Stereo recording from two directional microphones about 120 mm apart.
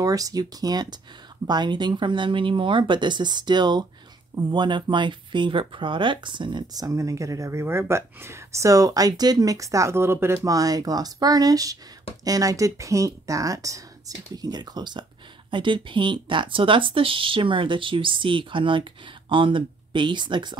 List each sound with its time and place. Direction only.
0.0 s speech: 30° right (ahead or behind)